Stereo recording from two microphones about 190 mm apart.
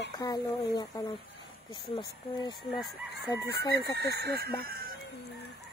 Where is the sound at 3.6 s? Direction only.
60° right (ahead or behind).